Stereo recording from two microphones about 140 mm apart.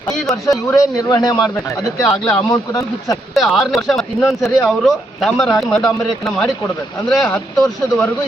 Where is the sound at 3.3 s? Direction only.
Centre (ahead or behind).